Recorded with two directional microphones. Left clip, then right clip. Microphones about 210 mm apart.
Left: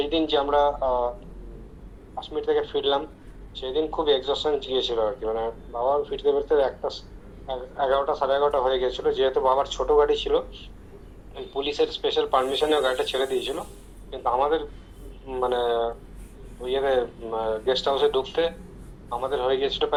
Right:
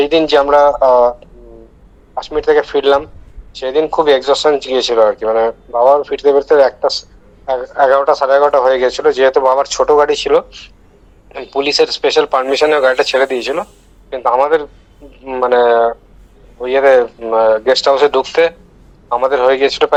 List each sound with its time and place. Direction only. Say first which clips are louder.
0.0 s speech: right 13 dB; 55° right (ahead or behind)
2.1 s speech: right 12 dB; 55° right (ahead or behind)